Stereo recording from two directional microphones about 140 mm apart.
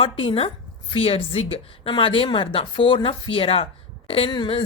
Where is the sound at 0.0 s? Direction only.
40° left (ahead or behind).